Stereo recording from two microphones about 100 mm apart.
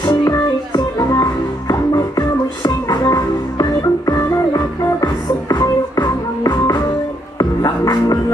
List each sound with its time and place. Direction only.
0.0 s music: 40° left (ahead or behind)